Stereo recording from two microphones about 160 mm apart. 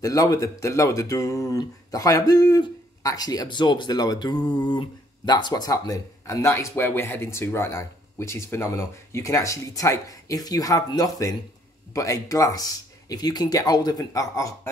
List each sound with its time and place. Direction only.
0.0 s speech: 20° left (ahead or behind)